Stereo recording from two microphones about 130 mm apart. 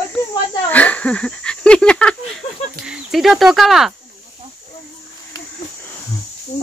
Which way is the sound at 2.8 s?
5° right (ahead or behind).